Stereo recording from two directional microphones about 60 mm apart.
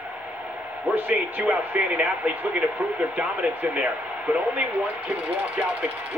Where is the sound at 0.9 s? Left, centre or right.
Right.